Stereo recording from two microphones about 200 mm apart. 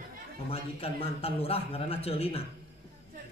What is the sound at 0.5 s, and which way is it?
Speech, 30° left (ahead or behind).